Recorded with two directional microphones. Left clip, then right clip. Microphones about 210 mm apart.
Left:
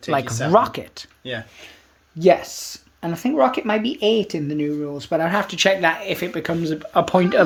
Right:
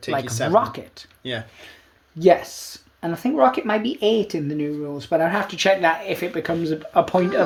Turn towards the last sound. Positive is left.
turn(degrees=50)  # may be behind; listen again after turning